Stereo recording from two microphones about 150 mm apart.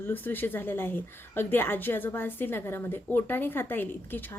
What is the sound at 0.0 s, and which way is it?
A woman's voice, 10° left (ahead or behind).